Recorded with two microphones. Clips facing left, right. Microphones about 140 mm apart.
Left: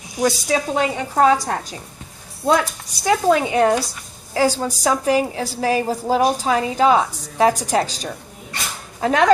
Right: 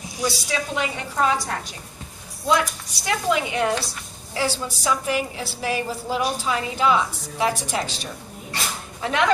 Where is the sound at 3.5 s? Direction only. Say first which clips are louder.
Left 6 dB; 45° left (ahead or behind).